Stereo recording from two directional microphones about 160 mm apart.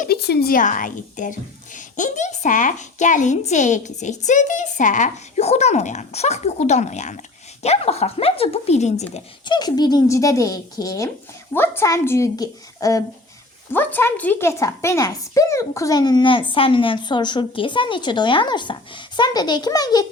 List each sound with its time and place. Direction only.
0.1 s a woman's voice: 85° left; by 9.0 s 45° left (ahead or behind)
9.5 s a woman's voice: 25° left (ahead or behind)